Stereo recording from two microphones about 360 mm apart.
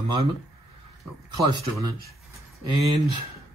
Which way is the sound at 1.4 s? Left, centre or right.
Centre.